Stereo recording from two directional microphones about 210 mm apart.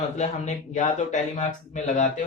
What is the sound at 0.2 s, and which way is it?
Speech, 35° left (ahead or behind).